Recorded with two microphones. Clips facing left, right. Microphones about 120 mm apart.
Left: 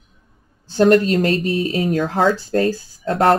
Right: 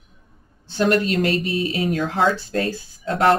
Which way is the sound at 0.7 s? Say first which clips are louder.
Left 5 dB; 40° left (ahead or behind).